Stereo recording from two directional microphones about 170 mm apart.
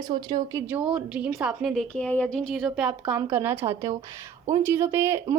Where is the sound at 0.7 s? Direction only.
5° right (ahead or behind).